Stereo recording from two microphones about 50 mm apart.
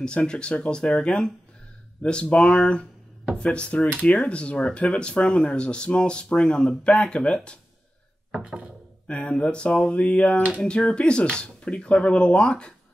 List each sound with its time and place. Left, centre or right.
0.0 s speech: centre
8.3 s a sound: right
9.0 s speech: left